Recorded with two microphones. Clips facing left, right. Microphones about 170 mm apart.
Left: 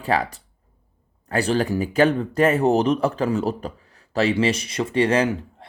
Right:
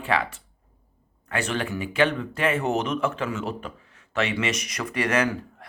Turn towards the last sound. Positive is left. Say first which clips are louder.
# left 3 dB
turn(degrees=30)  # may be behind; listen again after turning